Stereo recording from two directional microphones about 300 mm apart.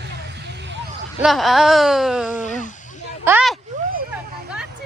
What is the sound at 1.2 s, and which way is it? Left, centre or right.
Speech, centre.